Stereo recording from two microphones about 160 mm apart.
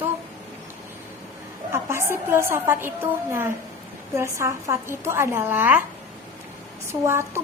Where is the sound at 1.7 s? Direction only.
15° right (ahead or behind).